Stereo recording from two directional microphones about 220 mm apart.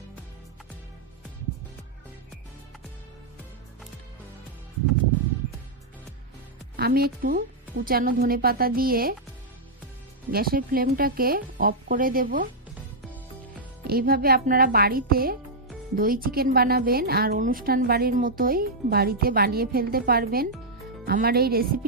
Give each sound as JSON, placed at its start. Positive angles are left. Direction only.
{"t": 6.8, "sound": "a woman's voice", "side_deg": -45}
{"t": 10.3, "sound": "a woman's voice", "side_deg": -40}
{"t": 13.8, "sound": "a woman's voice", "side_deg": -40}